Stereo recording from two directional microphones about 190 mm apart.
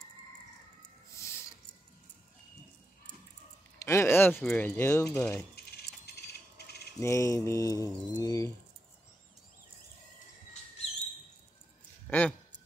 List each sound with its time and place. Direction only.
1.1 s a sound: 15° left (ahead or behind)
3.8 s speech: 15° left (ahead or behind)
4.4 s mantra: 10° left (ahead or behind)
5.7 s a sound: 55° left (ahead or behind)
7.0 s mantra: 15° left (ahead or behind)
12.1 s speech: 10° left (ahead or behind)